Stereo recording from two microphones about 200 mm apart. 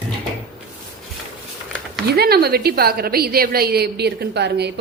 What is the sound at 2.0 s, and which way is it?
A woman's voice, 50° right (ahead or behind).